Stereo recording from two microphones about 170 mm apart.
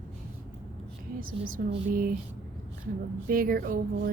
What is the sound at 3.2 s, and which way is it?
Speech, 55° right (ahead or behind).